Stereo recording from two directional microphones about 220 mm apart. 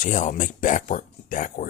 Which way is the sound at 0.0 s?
35° left (ahead or behind).